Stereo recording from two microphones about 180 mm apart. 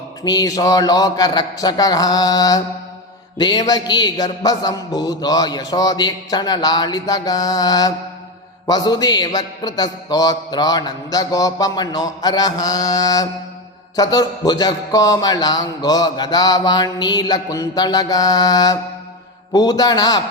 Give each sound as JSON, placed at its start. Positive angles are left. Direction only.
{"t": 0.3, "sound": "a man's voice", "side_deg": 20}